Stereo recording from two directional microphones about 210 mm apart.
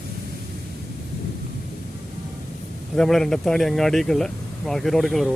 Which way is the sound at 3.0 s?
Centre (ahead or behind).